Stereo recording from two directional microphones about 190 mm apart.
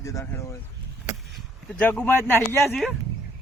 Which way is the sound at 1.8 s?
10° left (ahead or behind).